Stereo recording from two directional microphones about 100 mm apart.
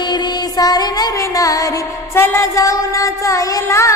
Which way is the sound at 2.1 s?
25° left (ahead or behind).